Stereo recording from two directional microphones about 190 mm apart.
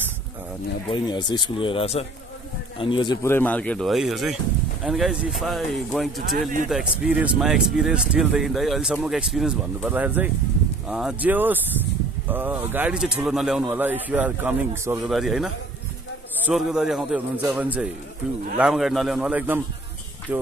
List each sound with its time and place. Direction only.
1.0 s speech: 25° left (ahead or behind)
3.3 s speech: 10° left (ahead or behind); by 19.6 s 10° right (ahead or behind)